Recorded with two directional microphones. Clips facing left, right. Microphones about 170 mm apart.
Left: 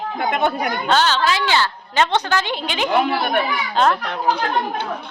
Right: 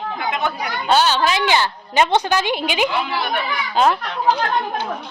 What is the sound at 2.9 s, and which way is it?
Speech, 50° left (ahead or behind).